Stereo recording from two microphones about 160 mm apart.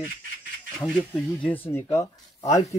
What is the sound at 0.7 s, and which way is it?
Speech, 5° left (ahead or behind).